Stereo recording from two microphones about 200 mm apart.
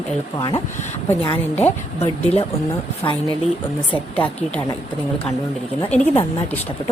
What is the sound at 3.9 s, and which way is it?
Speech, 5° left (ahead or behind).